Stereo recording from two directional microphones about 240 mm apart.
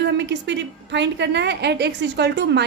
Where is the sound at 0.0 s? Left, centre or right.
Right.